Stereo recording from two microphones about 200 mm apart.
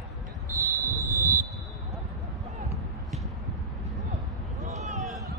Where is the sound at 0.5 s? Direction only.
45° right (ahead or behind).